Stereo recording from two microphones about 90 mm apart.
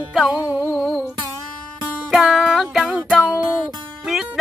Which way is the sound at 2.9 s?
15° right (ahead or behind).